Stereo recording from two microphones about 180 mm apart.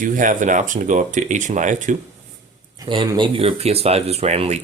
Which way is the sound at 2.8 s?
25° right (ahead or behind).